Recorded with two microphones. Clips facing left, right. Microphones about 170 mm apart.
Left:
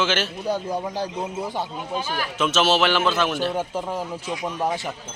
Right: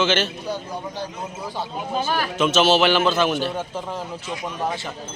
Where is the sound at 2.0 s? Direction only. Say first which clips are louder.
Right 6 dB; 45° right (ahead or behind).